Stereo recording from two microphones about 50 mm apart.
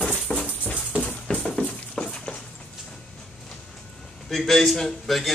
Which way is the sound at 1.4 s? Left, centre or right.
Centre.